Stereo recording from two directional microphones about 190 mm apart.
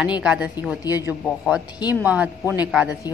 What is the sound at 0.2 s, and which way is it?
Speech, 5° right (ahead or behind).